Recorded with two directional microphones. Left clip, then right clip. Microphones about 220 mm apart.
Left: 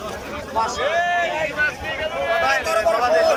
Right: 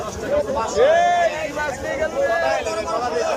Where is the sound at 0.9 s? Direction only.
40° right (ahead or behind).